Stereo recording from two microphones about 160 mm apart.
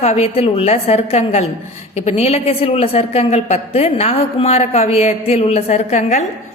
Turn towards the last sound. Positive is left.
turn(degrees=45)  # may be behind; listen again after turning